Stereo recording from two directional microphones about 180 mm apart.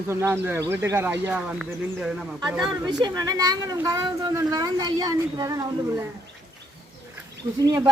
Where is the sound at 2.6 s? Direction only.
25° right (ahead or behind).